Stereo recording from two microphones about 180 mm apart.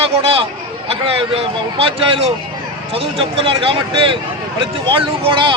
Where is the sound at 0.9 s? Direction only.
30° right (ahead or behind).